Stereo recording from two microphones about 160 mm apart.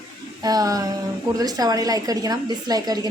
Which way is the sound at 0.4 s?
25° right (ahead or behind).